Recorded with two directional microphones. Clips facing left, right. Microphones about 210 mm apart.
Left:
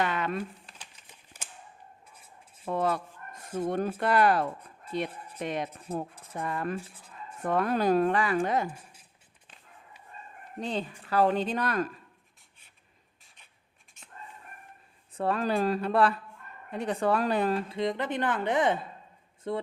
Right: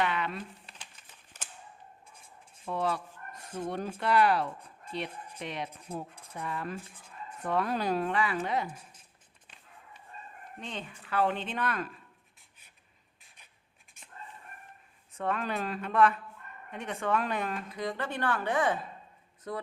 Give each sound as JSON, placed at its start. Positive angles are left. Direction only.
{"t": 0.0, "sound": "crumpling", "side_deg": 45}
{"t": 1.3, "sound": "a sound", "side_deg": 10}
{"t": 2.6, "sound": "speech", "side_deg": 50}
{"t": 10.6, "sound": "speech", "side_deg": 35}
{"t": 15.1, "sound": "speech", "side_deg": 35}